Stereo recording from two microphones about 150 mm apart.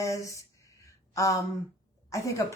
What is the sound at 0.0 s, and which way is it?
Speech, 20° left (ahead or behind).